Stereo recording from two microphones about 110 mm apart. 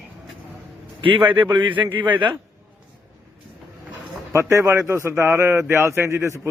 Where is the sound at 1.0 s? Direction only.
50° right (ahead or behind).